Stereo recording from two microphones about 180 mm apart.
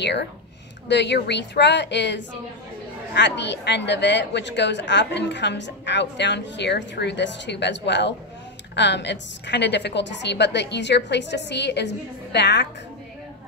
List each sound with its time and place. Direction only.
0.0 s a woman's voice: 70° left (ahead or behind)